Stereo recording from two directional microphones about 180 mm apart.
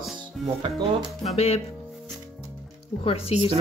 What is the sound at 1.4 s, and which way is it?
Speech, 35° left (ahead or behind).